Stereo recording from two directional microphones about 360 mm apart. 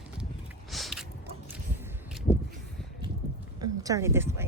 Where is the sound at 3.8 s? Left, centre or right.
Centre.